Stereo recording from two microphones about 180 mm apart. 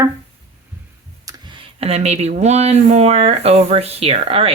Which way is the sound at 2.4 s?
40° right (ahead or behind).